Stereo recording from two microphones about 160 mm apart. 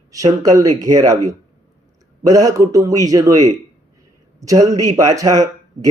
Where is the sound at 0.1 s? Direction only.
20° right (ahead or behind).